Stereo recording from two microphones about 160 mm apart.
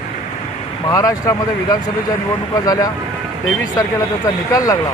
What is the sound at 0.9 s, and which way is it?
Speech, 20° left (ahead or behind).